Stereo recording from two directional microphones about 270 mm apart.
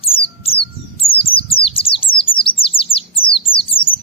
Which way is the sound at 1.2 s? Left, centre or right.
Centre.